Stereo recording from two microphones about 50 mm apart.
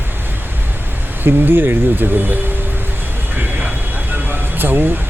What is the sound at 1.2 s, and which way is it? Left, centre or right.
Speech, right.